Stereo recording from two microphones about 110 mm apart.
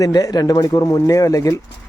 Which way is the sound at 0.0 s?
35° left (ahead or behind).